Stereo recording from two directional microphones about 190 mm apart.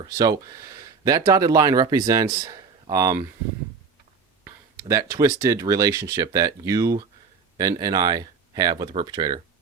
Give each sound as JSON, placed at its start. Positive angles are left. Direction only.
{"t": 0.0, "sound": "speech", "side_deg": -20}
{"t": 4.4, "sound": "speech", "side_deg": -15}